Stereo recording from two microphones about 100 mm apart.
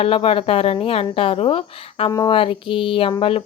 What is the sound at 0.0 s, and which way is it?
A woman's voice, 70° left (ahead or behind).